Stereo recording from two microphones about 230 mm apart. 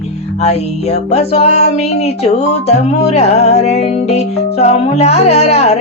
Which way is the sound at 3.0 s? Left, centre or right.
Left.